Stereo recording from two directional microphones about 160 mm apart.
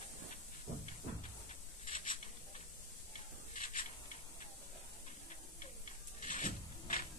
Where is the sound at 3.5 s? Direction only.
55° left (ahead or behind).